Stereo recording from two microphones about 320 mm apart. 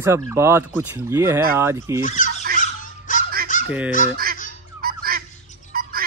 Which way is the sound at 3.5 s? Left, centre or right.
Left.